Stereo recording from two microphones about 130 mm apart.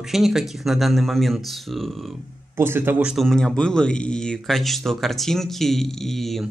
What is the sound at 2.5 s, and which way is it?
Speech, 15° right (ahead or behind).